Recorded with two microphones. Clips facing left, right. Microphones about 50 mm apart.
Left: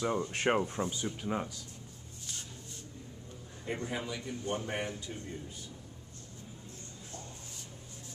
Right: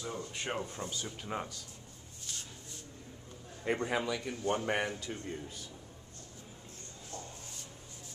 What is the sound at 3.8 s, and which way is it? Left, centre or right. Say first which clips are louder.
A man's voice: right 4 dB; right.